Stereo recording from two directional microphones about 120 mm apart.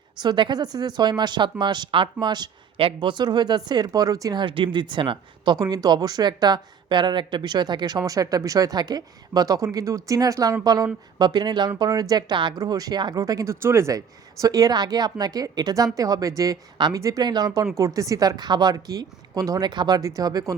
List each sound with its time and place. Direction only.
0.2 s speech: 40° right (ahead or behind)
16.7 s speech: 40° right (ahead or behind)